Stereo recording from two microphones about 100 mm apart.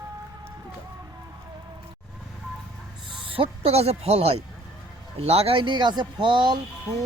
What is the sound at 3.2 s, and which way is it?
Speech, 65° right (ahead or behind).